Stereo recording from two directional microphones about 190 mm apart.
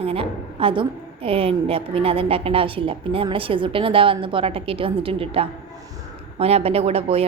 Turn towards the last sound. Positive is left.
turn(degrees=-30)  # may be behind; listen again after turning